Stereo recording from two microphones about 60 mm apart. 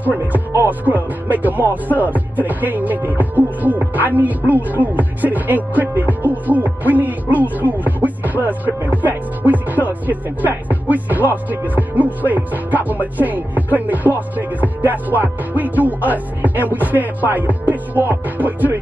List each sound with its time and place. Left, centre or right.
0.0 s speech: right